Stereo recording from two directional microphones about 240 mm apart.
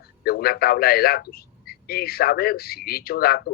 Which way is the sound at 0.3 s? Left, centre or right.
Left.